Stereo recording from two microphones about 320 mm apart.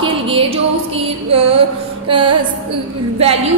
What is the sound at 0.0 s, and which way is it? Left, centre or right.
Music, centre.